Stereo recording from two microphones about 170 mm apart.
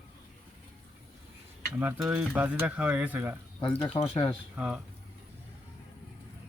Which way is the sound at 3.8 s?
35° left (ahead or behind).